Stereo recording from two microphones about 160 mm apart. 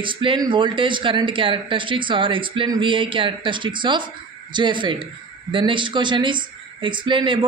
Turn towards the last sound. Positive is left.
turn(degrees=-30)  # may be behind; listen again after turning